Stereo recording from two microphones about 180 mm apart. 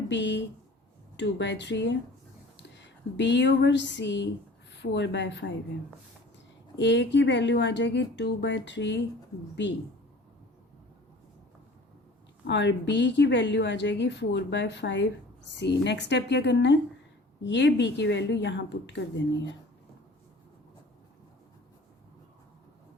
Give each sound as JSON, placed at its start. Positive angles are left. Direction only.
{"t": 0.1, "sound": "a woman's voice", "side_deg": 80}
{"t": 6.7, "sound": "a woman's voice", "side_deg": 80}
{"t": 12.5, "sound": "a woman's voice", "side_deg": 80}